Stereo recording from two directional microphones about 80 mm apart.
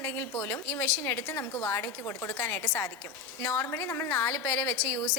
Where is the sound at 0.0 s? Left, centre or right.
Left.